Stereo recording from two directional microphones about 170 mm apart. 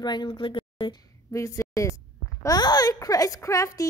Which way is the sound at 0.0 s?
25° left (ahead or behind).